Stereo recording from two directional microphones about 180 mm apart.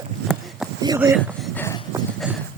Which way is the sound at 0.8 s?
20° right (ahead or behind).